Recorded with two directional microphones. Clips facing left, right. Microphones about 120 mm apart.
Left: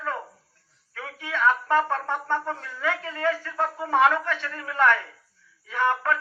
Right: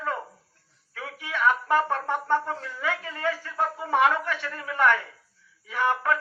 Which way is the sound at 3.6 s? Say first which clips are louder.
Even; 15° right (ahead or behind).